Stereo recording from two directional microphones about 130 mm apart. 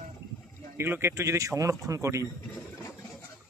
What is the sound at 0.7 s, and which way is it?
Speech, 15° right (ahead or behind).